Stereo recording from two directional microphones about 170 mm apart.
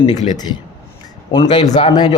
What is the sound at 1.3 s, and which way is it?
Speech, 30° left (ahead or behind).